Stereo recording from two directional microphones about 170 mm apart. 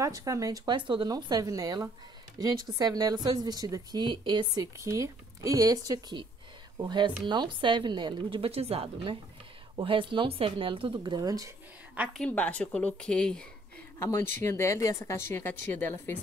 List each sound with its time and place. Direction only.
0.0 s speech: 20° right (ahead or behind)
11.9 s a woman's voice: 10° right (ahead or behind)
12.2 s speech: 10° left (ahead or behind)
13.9 s a woman's voice: 15° left (ahead or behind)